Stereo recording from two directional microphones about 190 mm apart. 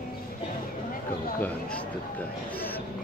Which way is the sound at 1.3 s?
5° left (ahead or behind).